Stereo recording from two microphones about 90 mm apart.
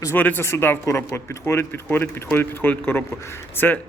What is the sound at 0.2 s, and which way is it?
Speech, 20° left (ahead or behind).